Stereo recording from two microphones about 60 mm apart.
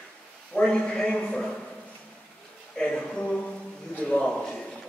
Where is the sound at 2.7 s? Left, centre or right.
Centre.